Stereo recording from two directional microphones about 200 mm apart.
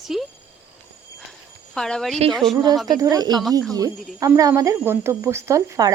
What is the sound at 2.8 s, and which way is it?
Speech, 20° right (ahead or behind).